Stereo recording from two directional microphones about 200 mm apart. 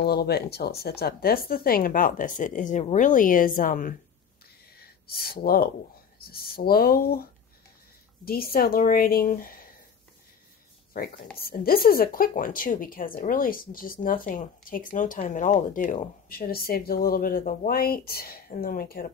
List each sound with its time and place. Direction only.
0.0 s speech: 50° left (ahead or behind)
8.3 s speech: 50° left (ahead or behind)
11.3 s speech: 50° left (ahead or behind)